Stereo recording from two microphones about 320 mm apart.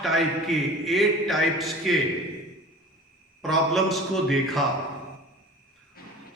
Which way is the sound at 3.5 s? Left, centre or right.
Centre.